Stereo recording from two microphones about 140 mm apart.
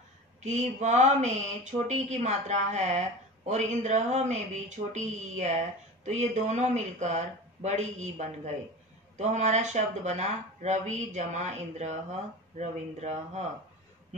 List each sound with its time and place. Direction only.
0.4 s speech: 55° right (ahead or behind)